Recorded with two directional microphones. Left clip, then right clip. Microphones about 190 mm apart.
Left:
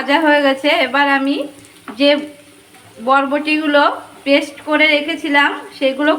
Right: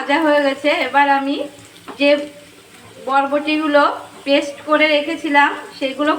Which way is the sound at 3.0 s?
55° left (ahead or behind).